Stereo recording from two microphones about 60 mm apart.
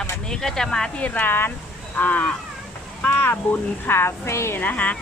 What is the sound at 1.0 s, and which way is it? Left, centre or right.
Speech, left.